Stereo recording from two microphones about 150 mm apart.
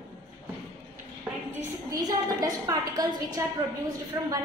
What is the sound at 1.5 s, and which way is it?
A woman's voice, 20° right (ahead or behind).